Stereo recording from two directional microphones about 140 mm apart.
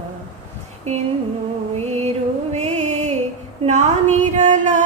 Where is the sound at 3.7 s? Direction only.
55° right (ahead or behind).